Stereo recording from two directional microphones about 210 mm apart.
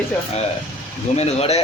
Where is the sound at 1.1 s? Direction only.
30° left (ahead or behind).